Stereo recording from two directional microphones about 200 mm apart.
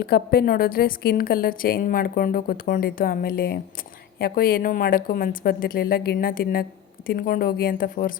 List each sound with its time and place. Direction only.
0.0 s a woman's voice: 50° left (ahead or behind)